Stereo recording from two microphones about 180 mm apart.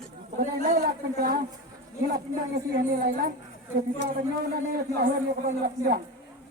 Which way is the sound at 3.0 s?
55° right (ahead or behind).